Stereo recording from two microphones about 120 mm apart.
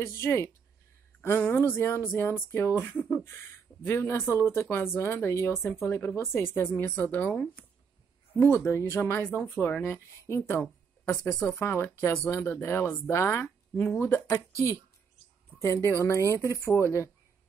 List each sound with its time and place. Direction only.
0.0 s a woman's voice: 20° left (ahead or behind)
8.6 s a woman's voice: 30° left (ahead or behind)
15.9 s a woman's voice: 25° left (ahead or behind)